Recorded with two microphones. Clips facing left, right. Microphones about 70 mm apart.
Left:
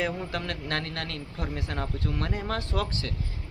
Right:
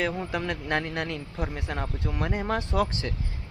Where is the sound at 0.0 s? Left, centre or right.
Centre.